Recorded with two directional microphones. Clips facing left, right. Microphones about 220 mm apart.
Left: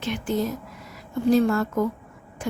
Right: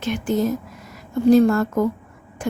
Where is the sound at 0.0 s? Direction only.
45° right (ahead or behind).